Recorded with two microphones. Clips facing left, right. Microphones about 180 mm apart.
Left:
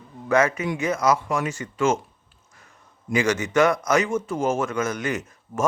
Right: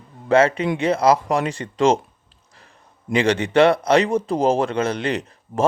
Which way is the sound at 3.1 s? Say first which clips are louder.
Right 3 dB; 30° right (ahead or behind).